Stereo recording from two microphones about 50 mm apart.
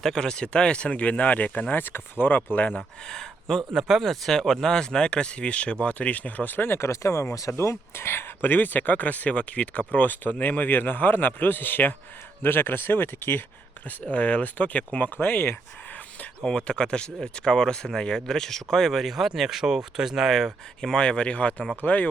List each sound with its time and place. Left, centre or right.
0.0 s speech: centre; by 2.4 s left
2.7 s speech: centre
3.8 s speech: centre; by 6.7 s left
6.7 s speech: left
7.4 s speech: left
14.0 s speech: left
16.4 s speech: centre
20.9 s speech: centre